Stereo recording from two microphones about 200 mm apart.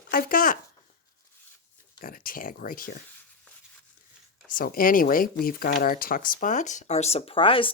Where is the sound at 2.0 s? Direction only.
45° left (ahead or behind).